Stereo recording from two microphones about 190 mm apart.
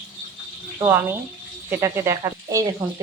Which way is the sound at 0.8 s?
10° right (ahead or behind).